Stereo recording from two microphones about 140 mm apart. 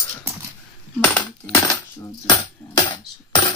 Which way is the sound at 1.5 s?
25° left (ahead or behind).